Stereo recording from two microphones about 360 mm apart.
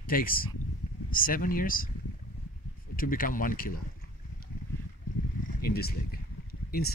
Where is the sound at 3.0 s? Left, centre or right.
Left.